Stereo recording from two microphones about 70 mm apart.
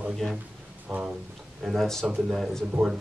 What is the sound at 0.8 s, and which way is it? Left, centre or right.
Speech, centre.